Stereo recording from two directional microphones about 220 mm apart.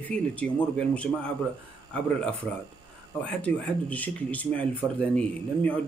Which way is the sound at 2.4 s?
Centre (ahead or behind).